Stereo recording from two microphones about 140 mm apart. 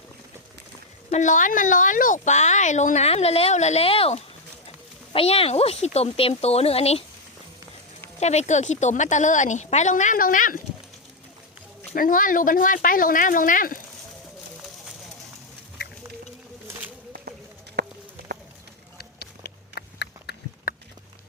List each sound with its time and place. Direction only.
1.1 s speech: 60° left (ahead or behind); by 7.0 s 45° left (ahead or behind)
8.2 s speech: 55° left (ahead or behind); by 10.6 s 80° left
11.9 s speech: 85° left
20.7 s a sound: 85° left